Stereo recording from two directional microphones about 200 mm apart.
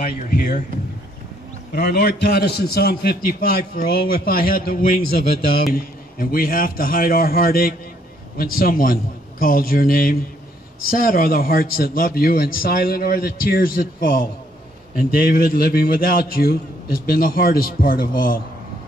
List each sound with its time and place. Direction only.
0.0 s a man's voice: 55° left (ahead or behind)
1.7 s a man's voice: 50° left (ahead or behind)